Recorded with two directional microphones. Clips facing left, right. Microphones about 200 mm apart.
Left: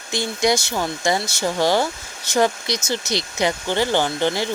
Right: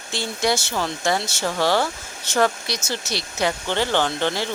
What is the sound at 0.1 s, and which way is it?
Speech, 15° left (ahead or behind).